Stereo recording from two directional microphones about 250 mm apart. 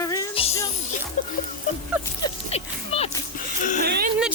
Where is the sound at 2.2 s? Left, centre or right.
Left.